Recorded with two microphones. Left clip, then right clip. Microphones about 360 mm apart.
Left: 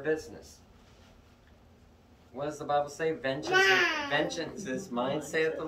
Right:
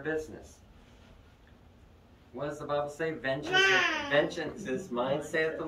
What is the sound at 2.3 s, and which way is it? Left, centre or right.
Speech, centre.